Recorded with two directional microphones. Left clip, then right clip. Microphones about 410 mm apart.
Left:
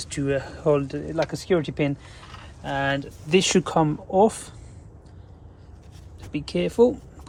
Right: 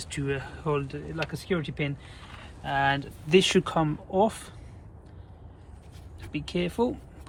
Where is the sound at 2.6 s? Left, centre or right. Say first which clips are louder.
Even; centre.